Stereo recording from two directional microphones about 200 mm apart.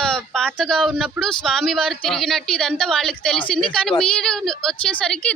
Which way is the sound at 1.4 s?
Centre (ahead or behind).